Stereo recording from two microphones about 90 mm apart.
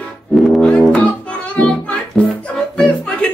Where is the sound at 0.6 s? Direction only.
10° left (ahead or behind).